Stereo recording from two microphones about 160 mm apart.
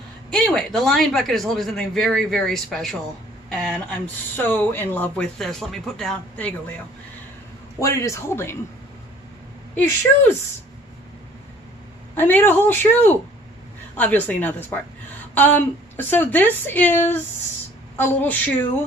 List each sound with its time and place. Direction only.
0.3 s speech: 5° left (ahead or behind)
7.8 s speech: 20° left (ahead or behind)
9.7 s speech: 10° left (ahead or behind)
12.1 s speech: 10° left (ahead or behind)